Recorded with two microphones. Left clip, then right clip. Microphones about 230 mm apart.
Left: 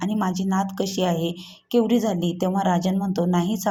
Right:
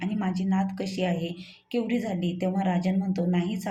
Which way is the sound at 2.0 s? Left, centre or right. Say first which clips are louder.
Left 6 dB; centre.